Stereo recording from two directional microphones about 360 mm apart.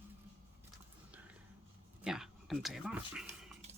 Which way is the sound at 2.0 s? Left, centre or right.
Centre.